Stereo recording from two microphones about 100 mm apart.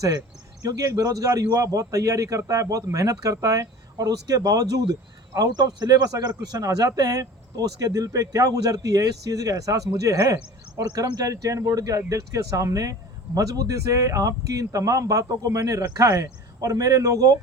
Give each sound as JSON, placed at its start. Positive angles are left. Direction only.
{"t": 0.6, "sound": "a man's voice", "side_deg": -35}